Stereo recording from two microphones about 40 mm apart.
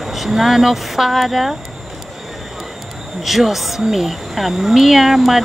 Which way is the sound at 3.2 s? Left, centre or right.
Centre.